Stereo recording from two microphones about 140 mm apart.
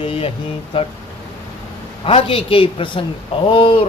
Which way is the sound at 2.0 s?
40° left (ahead or behind).